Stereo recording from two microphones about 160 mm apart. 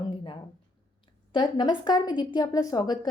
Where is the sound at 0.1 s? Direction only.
35° left (ahead or behind).